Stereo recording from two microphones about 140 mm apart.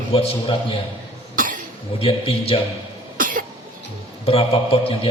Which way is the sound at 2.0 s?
40° left (ahead or behind).